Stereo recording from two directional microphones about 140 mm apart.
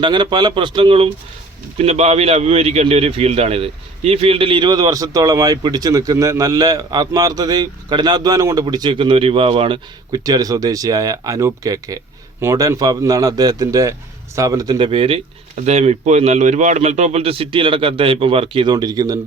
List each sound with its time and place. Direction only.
0.0 s a man's voice: 35° right (ahead or behind)
10.1 s speech: 25° right (ahead or behind)
14.8 s speech: 40° right (ahead or behind)
15.5 s speech: 55° right (ahead or behind); by 19.2 s 25° right (ahead or behind)